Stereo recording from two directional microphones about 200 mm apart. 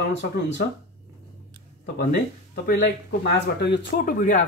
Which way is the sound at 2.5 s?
50° left (ahead or behind).